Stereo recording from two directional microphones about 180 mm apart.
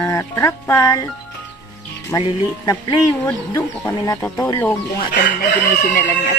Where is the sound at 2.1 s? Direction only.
20° left (ahead or behind).